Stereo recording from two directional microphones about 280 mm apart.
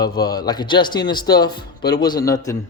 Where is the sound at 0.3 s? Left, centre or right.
Centre.